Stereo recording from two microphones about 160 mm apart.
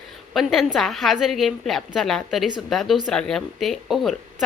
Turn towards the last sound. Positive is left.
turn(degrees=0)  # may be behind; listen again after turning